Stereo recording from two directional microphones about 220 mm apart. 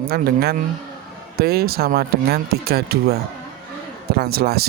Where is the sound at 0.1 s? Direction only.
45° right (ahead or behind).